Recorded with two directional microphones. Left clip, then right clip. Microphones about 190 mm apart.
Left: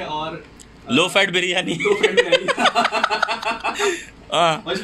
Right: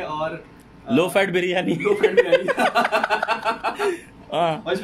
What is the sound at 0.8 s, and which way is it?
Speech, 15° right (ahead or behind).